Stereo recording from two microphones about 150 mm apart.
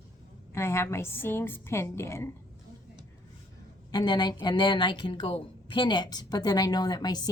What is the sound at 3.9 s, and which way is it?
A woman's voice, 25° left (ahead or behind).